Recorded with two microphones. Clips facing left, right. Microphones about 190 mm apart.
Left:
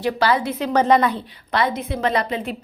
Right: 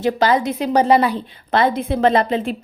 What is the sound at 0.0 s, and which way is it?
A woman's voice, 20° right (ahead or behind).